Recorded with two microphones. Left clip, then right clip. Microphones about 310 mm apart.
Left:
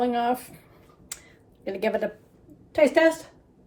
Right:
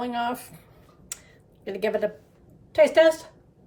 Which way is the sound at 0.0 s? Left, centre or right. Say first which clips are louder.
Left 4 dB; centre.